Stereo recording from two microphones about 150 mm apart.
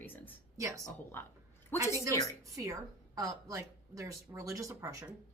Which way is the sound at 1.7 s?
15° left (ahead or behind).